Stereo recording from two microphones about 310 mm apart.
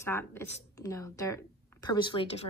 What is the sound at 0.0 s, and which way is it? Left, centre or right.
A woman's voice, centre.